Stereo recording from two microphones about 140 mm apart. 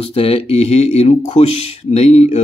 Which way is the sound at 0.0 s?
45° left (ahead or behind).